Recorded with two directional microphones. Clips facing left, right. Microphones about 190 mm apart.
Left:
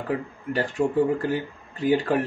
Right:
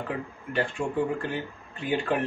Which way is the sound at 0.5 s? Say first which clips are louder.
Left 5 dB; 40° left (ahead or behind).